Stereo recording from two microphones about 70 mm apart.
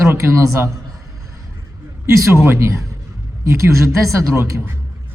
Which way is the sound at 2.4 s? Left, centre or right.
Right.